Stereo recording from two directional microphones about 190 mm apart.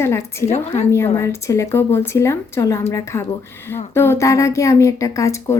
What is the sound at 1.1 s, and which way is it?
A woman's voice, 15° left (ahead or behind).